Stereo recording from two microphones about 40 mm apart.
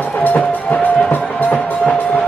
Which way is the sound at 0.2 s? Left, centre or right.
Left.